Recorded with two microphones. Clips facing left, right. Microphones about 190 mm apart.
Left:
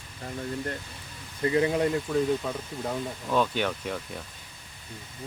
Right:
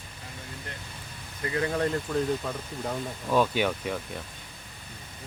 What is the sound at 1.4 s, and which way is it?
Speech, 20° left (ahead or behind).